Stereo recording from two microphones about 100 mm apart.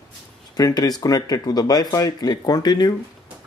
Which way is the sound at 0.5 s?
40° left (ahead or behind).